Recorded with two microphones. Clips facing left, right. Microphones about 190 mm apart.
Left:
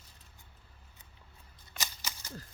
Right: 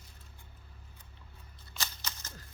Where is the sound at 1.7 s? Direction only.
15° left (ahead or behind).